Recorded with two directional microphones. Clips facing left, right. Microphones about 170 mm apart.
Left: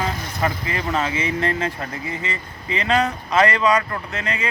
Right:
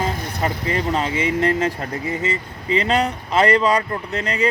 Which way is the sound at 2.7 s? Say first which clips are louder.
Right 2 dB; 35° right (ahead or behind).